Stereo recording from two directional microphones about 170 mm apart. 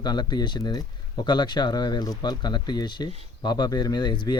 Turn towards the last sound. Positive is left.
turn(degrees=25)  # may be behind; listen again after turning